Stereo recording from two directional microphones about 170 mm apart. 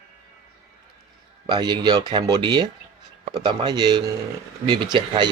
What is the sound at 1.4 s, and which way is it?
Speech, 25° right (ahead or behind).